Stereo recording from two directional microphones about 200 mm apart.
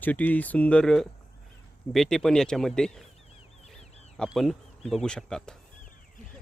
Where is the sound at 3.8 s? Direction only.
35° left (ahead or behind).